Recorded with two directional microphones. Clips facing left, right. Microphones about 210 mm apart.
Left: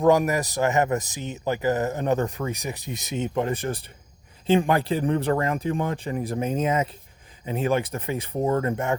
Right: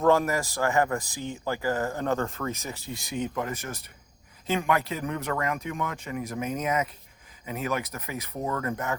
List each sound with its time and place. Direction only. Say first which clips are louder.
0.0 s speech: left 3 dB; 15° left (ahead or behind)